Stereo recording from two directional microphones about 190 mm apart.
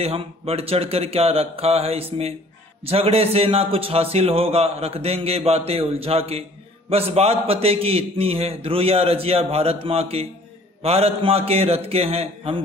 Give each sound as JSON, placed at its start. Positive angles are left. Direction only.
{"t": 0.0, "sound": "a man's voice", "side_deg": -30}